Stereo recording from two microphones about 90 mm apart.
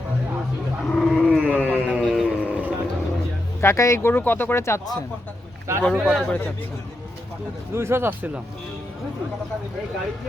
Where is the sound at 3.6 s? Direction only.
30° left (ahead or behind).